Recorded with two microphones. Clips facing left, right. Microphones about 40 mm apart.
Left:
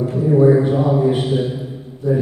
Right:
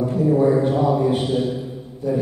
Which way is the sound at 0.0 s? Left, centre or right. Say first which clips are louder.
Left 3 dB; centre.